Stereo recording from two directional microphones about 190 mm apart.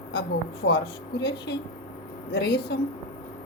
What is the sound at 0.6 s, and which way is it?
A woman's voice, 60° left (ahead or behind).